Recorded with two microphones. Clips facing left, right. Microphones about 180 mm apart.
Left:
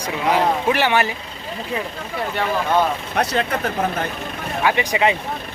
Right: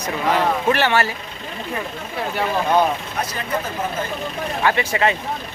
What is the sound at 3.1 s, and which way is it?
Speech, 70° left (ahead or behind).